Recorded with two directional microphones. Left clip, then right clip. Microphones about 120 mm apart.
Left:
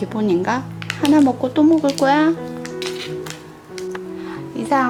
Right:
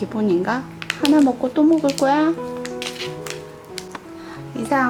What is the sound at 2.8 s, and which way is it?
Music, 5° right (ahead or behind).